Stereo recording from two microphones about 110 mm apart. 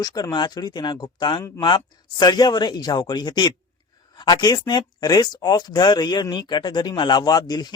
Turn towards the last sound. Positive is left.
turn(degrees=40)  # may be behind; listen again after turning